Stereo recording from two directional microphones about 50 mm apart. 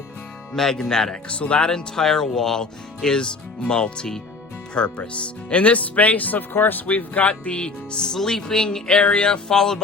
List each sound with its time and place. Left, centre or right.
0.5 s speech: centre
1.3 s speech: left